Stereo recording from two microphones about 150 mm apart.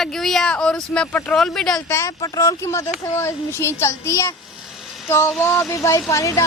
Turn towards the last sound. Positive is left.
turn(degrees=20)  # may be behind; listen again after turning